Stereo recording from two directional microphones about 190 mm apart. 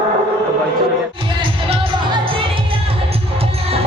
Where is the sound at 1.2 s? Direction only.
25° right (ahead or behind).